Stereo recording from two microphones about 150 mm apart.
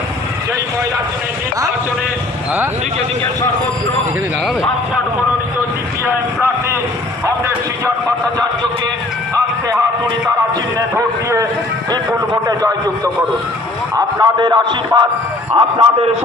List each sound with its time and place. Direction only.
6.1 s vehicle: 15° right (ahead or behind)
10.8 s speech: 20° right (ahead or behind)
14.2 s speech: 30° right (ahead or behind)